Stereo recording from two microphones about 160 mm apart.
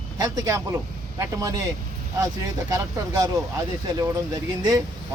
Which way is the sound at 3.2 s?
20° right (ahead or behind).